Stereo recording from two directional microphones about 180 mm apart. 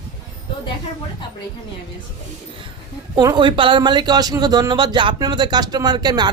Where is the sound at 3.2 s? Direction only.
25° right (ahead or behind).